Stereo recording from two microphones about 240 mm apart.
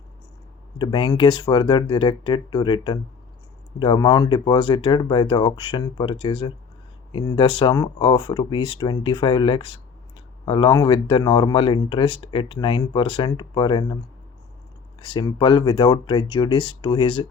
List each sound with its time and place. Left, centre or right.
0.8 s speech: centre
15.0 s speech: centre